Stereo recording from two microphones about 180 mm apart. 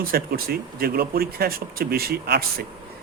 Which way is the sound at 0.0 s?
55° right (ahead or behind).